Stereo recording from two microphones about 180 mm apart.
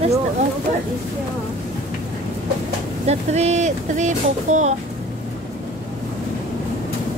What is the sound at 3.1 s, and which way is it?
Speech, 35° right (ahead or behind).